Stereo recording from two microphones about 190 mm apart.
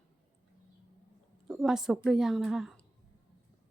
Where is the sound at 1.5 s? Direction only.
Centre (ahead or behind).